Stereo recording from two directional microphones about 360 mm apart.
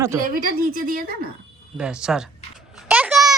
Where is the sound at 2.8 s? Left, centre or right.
Centre.